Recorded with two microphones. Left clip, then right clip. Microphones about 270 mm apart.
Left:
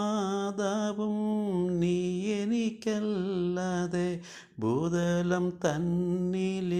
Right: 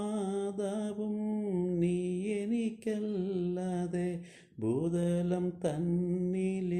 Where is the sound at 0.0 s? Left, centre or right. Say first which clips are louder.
Left 4 dB; centre.